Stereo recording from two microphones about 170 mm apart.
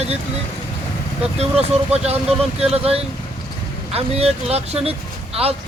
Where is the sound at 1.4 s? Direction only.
40° right (ahead or behind).